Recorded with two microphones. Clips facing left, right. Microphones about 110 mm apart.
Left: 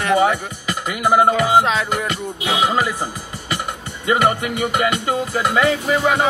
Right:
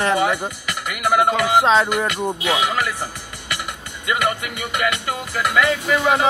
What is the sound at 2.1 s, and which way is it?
Music, 30° left (ahead or behind).